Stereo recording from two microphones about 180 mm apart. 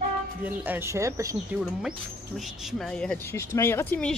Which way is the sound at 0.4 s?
10° right (ahead or behind).